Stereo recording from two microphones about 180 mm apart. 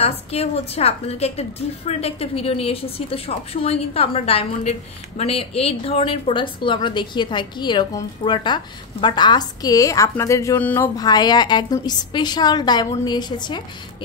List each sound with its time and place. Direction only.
0.0 s a woman's voice: 35° left (ahead or behind); by 10.9 s 10° left (ahead or behind)
11.0 s a woman's voice: 20° left (ahead or behind)